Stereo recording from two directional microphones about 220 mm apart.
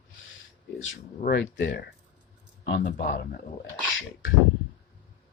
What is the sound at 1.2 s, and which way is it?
Speech, 50° left (ahead or behind).